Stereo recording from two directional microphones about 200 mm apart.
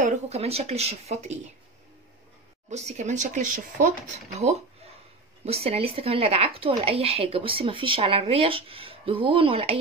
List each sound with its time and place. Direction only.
0.0 s speech: 30° right (ahead or behind)
2.7 s speech: 35° right (ahead or behind)